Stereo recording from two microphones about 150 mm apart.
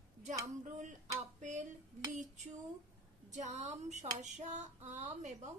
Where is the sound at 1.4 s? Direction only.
55° right (ahead or behind).